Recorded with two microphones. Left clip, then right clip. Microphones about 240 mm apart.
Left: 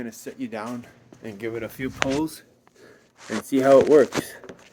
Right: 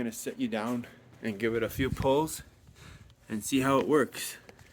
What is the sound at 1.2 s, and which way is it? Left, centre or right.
Speech, centre.